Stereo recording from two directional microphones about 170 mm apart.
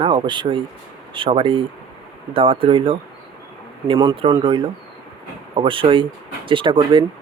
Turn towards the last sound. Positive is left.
turn(degrees=-30)  # may be behind; listen again after turning